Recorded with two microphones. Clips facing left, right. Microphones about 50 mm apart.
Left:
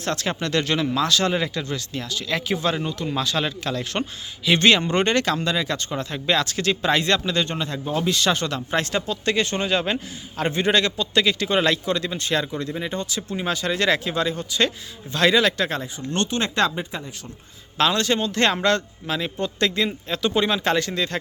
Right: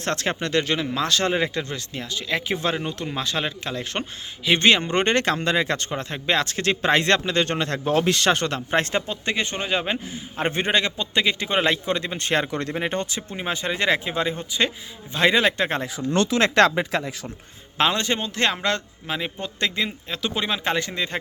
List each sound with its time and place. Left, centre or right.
0.0 s speech: right
0.3 s a man's voice: right
0.9 s a man's voice: right
7.4 s speech: right
9.3 s a man's voice: centre; by 12.5 s right
12.5 s speech: right
13.1 s a man's voice: right
16.4 s speech: right
17.7 s a man's voice: right
18.3 s speech: centre